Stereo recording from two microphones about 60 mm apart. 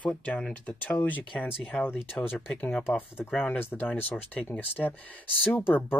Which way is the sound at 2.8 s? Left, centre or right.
Left.